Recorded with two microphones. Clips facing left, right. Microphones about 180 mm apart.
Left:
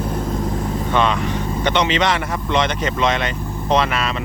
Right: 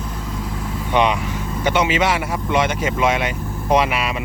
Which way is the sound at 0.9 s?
15° right (ahead or behind).